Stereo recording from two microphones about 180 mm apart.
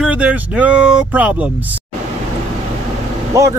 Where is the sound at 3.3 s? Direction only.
15° right (ahead or behind).